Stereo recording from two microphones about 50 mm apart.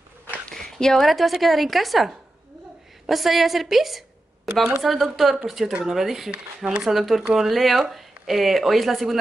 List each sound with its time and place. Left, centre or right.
0.5 s a sound: centre
1.0 s a woman's voice: centre
6.3 s speech: centre
6.8 s a woman's voice: centre